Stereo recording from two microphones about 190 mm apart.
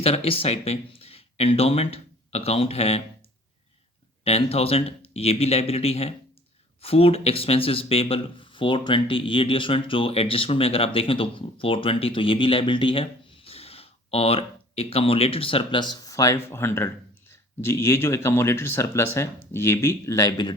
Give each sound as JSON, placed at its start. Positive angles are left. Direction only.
{"t": 0.0, "sound": "speech", "side_deg": 30}
{"t": 4.2, "sound": "speech", "side_deg": 30}